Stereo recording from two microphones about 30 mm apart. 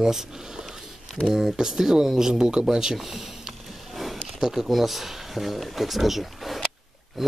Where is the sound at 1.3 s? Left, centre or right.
Centre.